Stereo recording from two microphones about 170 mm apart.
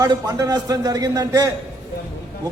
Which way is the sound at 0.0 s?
20° right (ahead or behind).